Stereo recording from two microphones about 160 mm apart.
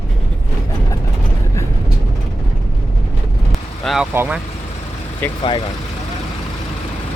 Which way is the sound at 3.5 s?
Centre (ahead or behind).